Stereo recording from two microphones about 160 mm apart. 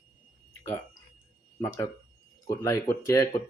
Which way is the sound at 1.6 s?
15° left (ahead or behind).